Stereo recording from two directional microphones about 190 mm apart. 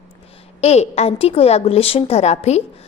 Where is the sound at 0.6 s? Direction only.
35° left (ahead or behind).